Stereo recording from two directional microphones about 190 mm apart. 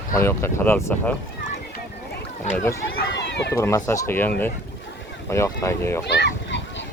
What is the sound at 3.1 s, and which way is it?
Run, 65° left (ahead or behind).